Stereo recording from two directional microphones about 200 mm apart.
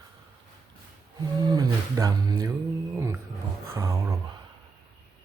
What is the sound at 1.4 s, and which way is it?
Speech, 20° right (ahead or behind).